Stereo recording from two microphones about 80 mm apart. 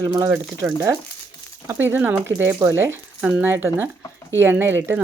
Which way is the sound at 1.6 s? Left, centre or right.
Right.